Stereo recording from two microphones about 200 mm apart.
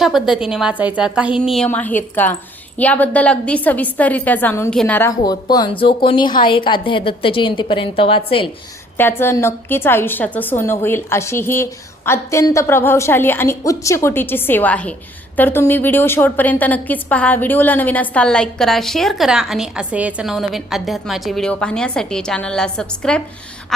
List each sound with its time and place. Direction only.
0.0 s a woman's voice: centre (ahead or behind); by 8.4 s 25° left (ahead or behind)
9.0 s a woman's voice: 10° left (ahead or behind)